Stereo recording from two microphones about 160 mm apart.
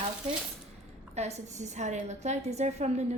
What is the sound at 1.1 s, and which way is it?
A woman's voice, 45° right (ahead or behind).